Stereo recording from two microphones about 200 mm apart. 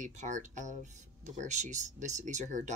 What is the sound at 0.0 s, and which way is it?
Speech, 35° right (ahead or behind).